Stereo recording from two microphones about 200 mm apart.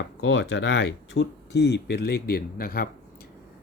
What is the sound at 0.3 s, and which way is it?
Speech, 65° left (ahead or behind).